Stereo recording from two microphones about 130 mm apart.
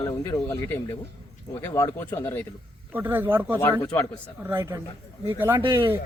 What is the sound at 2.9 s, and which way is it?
A man's voice, 15° right (ahead or behind).